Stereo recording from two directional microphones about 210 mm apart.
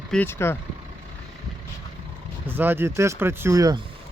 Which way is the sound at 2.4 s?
10° right (ahead or behind).